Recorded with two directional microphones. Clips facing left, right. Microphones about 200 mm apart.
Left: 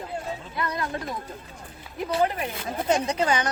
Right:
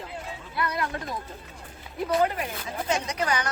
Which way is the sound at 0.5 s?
25° left (ahead or behind).